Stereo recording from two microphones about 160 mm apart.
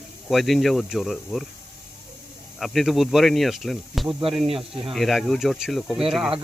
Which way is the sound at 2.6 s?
Centre (ahead or behind).